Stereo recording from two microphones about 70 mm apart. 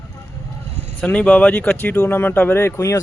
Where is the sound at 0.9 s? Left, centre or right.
Centre.